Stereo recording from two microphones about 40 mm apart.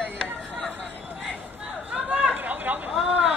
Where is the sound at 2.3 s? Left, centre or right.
Right.